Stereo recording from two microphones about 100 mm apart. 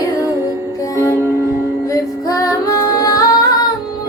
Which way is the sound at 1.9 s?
35° left (ahead or behind).